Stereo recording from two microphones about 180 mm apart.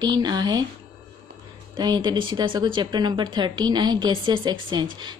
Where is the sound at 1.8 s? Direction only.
25° right (ahead or behind).